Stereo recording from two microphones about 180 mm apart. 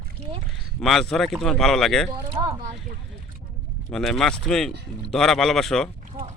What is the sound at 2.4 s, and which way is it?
Speech, 25° right (ahead or behind).